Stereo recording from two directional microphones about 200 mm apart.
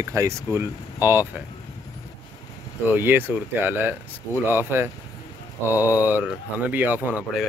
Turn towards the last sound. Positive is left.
turn(degrees=-5)  # may be behind; listen again after turning